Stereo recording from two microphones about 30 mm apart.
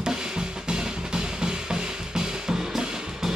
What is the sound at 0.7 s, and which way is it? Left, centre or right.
Drum, right.